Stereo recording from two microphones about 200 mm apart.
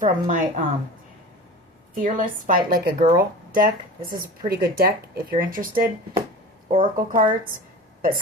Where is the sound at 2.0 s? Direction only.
40° right (ahead or behind).